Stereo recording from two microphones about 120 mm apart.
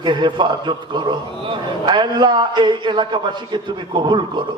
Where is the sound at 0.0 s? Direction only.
40° right (ahead or behind).